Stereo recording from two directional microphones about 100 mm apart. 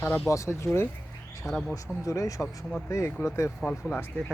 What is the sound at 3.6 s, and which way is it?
Speech, 10° left (ahead or behind).